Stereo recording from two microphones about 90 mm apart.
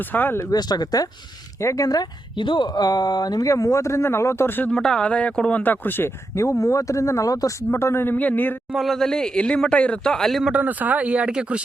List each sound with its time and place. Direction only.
0.1 s speech: 20° left (ahead or behind)
0.5 s speech: 50° left (ahead or behind)
2.3 s speech: 60° left (ahead or behind); by 4.7 s 25° left (ahead or behind)
4.7 s speech: 5° left (ahead or behind)
8.7 s speech: centre (ahead or behind)
10.5 s speech: 20° right (ahead or behind)